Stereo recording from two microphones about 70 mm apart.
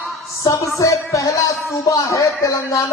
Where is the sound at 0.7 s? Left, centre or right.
Left.